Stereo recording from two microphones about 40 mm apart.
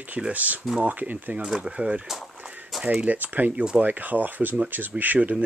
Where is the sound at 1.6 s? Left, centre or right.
Right.